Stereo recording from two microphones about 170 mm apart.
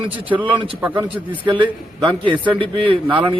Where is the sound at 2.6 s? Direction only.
30° right (ahead or behind).